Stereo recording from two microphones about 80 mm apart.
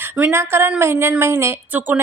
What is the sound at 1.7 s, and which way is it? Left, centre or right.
Speech, right.